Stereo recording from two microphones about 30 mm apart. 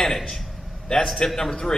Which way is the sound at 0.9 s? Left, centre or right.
Left.